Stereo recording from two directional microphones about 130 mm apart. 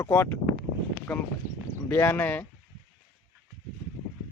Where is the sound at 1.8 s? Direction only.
15° left (ahead or behind).